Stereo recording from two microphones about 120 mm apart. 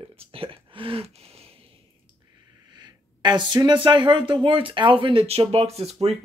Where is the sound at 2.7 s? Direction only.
35° right (ahead or behind).